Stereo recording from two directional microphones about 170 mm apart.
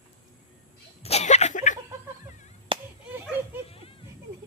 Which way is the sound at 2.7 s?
30° right (ahead or behind).